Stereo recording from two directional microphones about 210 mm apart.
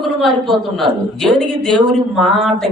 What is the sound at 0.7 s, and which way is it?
A man's voice, centre (ahead or behind).